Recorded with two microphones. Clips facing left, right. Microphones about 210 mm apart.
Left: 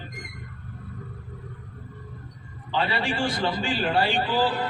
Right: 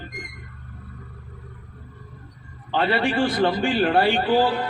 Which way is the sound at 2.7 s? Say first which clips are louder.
Right 5 dB; 55° right (ahead or behind).